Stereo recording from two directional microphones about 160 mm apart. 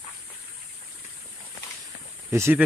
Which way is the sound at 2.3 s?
15° right (ahead or behind).